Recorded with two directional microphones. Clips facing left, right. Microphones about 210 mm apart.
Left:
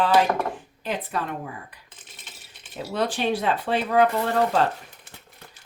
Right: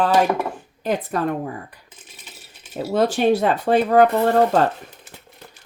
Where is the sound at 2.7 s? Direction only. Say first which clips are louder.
Right 7 dB; 45° right (ahead or behind).